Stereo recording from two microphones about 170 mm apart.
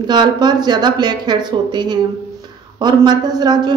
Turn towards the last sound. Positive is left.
turn(degrees=-25)  # may be behind; listen again after turning